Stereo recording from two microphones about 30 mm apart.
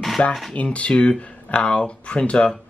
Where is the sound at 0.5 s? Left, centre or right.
Left.